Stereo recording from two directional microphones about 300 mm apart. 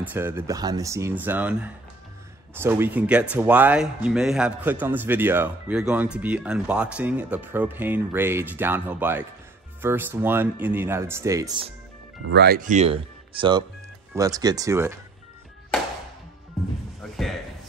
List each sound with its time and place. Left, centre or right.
0.0 s speech: centre
12.3 s speech: right; by 15.0 s centre
17.0 s speech: centre